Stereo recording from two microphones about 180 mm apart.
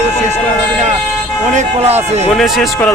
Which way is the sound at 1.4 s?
40° right (ahead or behind).